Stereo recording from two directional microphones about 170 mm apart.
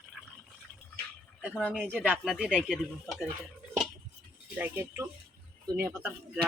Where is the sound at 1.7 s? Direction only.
5° right (ahead or behind).